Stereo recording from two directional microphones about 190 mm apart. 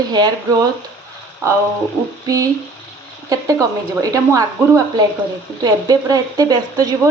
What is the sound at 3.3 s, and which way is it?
A woman's voice, 15° right (ahead or behind).